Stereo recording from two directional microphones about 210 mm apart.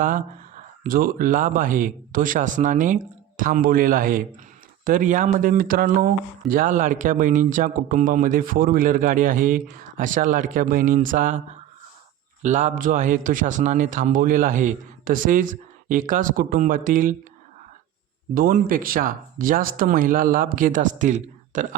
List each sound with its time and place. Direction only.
0.0 s a man's voice: 40° right (ahead or behind)
12.4 s a man's voice: 35° right (ahead or behind)
18.3 s a man's voice: 40° right (ahead or behind)